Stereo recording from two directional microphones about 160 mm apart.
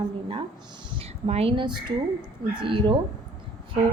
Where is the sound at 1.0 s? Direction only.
40° right (ahead or behind).